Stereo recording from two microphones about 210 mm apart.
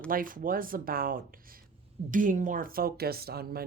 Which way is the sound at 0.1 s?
40° right (ahead or behind).